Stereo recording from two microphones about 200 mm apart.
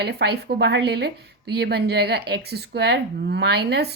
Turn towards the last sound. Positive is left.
turn(degrees=-55)  # may be behind; listen again after turning